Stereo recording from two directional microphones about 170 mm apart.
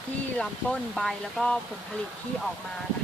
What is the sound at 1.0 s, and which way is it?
Speech, centre (ahead or behind).